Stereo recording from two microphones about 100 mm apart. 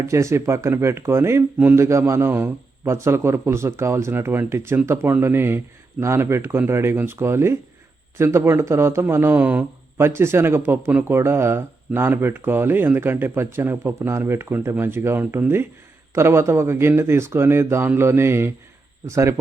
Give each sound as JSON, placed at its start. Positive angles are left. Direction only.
{"t": 0.0, "sound": "speech", "side_deg": -30}